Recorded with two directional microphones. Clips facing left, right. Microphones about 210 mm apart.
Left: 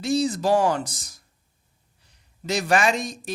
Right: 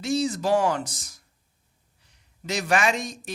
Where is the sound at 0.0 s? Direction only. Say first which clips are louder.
Left 2 dB; 35° left (ahead or behind).